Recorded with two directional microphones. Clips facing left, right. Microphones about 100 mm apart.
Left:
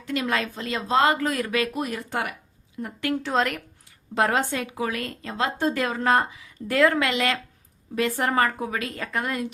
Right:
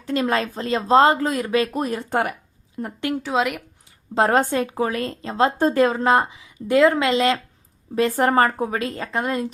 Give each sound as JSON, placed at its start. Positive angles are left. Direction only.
{"t": 0.0, "sound": "speech", "side_deg": -35}
{"t": 3.2, "sound": "speech", "side_deg": -5}
{"t": 4.1, "sound": "speech", "side_deg": -30}
{"t": 8.1, "sound": "speech", "side_deg": -40}